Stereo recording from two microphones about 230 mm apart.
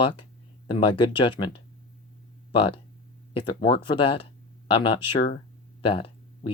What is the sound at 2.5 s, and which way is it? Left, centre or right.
Speech, left.